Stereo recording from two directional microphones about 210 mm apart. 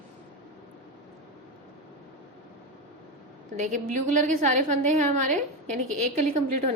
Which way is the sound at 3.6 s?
35° right (ahead or behind).